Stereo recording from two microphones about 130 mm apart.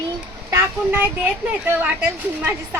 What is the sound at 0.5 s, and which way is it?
A woman's voice, 20° right (ahead or behind).